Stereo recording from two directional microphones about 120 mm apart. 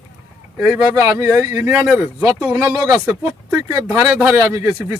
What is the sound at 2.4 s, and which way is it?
Speech, 30° right (ahead or behind).